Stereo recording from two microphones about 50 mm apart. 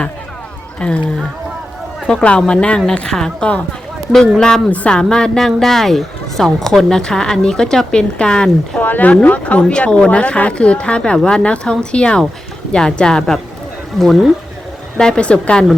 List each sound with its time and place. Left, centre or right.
0.8 s speech: left
2.2 s speech: left
4.7 s speech: left
4.9 s speech: centre
8.8 s speech: left; by 13.4 s centre
14.0 s speech: centre
14.9 s speech: centre